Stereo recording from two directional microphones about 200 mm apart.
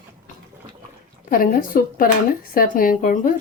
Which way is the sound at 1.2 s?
45° left (ahead or behind).